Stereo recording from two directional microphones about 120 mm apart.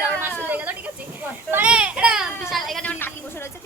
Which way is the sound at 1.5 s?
20° right (ahead or behind).